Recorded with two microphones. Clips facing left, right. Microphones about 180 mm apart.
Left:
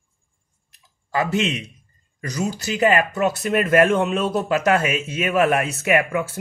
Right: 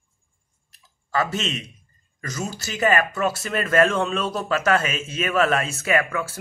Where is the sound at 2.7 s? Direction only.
20° left (ahead or behind).